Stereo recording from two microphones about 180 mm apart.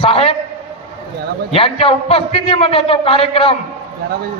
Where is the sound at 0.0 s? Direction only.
30° left (ahead or behind).